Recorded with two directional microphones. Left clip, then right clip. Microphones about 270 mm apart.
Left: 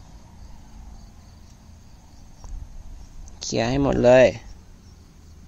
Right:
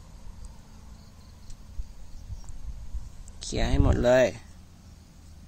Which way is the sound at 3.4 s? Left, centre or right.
Centre.